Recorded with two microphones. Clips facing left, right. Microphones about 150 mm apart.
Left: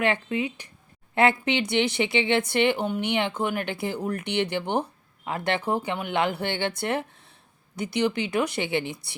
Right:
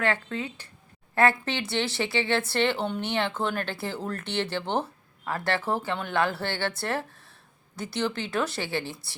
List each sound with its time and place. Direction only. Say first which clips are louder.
0.0 s speech: left 3 dB; 15° left (ahead or behind)